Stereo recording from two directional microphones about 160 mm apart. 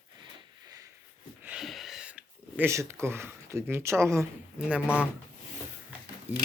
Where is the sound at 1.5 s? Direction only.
Centre (ahead or behind); by 4.3 s 15° right (ahead or behind).